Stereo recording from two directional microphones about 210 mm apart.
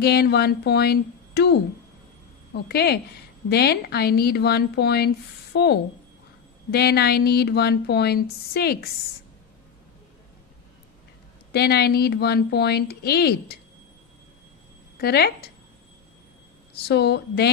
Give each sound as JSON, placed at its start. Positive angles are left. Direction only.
{"t": 0.0, "sound": "speech", "side_deg": 50}
{"t": 11.5, "sound": "speech", "side_deg": 50}
{"t": 15.0, "sound": "speech", "side_deg": 50}
{"t": 16.7, "sound": "speech", "side_deg": 50}